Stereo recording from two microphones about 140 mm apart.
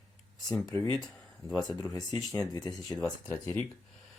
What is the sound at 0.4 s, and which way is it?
Speech, 5° left (ahead or behind).